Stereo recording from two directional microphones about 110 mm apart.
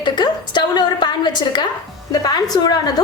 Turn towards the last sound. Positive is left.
turn(degrees=35)  # may be behind; listen again after turning